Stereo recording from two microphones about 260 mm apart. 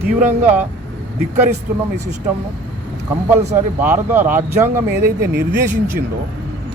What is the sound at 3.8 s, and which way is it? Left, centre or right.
Speech, centre.